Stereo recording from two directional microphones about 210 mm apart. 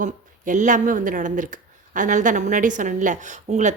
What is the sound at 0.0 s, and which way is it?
Speech, 35° right (ahead or behind).